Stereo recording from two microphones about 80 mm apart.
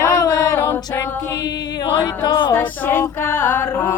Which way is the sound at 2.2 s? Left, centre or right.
Left.